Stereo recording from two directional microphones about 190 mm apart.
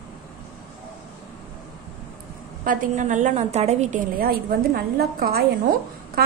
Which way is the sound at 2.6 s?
45° right (ahead or behind).